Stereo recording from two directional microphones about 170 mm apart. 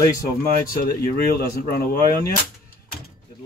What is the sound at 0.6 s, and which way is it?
Speech, 60° left (ahead or behind).